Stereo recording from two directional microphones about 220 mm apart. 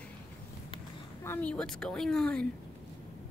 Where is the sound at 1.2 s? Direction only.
10° left (ahead or behind).